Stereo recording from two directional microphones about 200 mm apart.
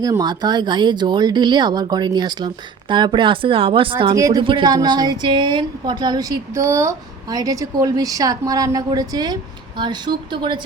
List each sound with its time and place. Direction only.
0.0 s speech: 20° right (ahead or behind)